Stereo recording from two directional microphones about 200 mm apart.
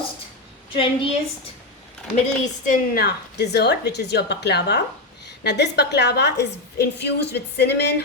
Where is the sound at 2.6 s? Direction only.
45° left (ahead or behind).